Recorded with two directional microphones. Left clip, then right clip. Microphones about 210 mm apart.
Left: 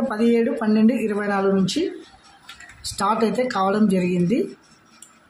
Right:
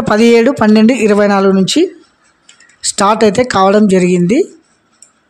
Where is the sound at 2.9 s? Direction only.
50° right (ahead or behind).